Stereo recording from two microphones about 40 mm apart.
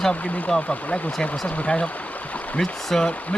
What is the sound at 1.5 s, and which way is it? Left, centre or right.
Speech, left.